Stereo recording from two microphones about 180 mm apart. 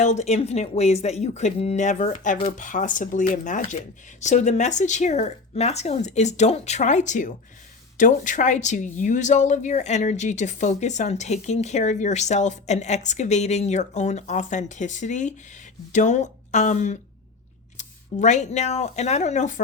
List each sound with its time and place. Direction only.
0.0 s speech: 40° left (ahead or behind)